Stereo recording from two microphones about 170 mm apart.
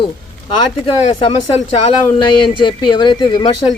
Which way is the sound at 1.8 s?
30° left (ahead or behind).